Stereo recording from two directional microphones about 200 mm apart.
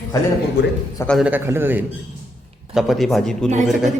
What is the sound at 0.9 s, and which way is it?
Speech, 5° left (ahead or behind).